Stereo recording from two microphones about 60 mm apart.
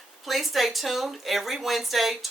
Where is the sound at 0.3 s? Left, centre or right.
Centre.